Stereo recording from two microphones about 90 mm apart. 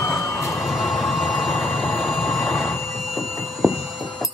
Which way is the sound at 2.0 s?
Centre (ahead or behind).